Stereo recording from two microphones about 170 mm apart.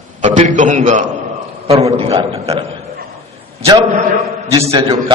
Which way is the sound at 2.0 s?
35° right (ahead or behind).